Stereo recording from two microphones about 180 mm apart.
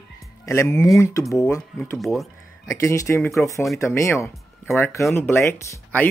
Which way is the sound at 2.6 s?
15° left (ahead or behind).